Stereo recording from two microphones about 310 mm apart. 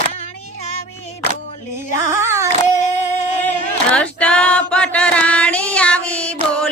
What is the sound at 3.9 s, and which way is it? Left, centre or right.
Female singing, centre.